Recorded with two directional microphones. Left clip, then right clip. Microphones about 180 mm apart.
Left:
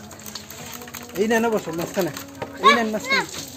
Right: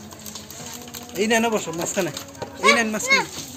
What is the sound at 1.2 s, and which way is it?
Speech, 35° left (ahead or behind).